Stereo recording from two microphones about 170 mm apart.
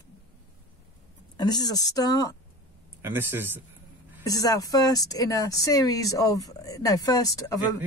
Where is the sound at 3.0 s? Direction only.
10° right (ahead or behind).